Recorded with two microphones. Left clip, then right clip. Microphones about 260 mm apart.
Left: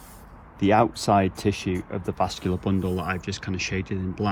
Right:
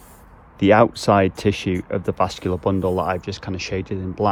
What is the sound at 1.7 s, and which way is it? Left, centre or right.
Speech, left.